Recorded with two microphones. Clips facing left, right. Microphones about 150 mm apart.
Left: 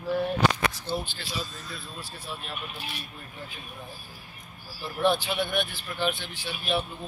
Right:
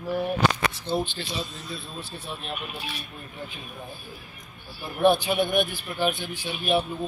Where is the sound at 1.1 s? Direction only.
20° right (ahead or behind).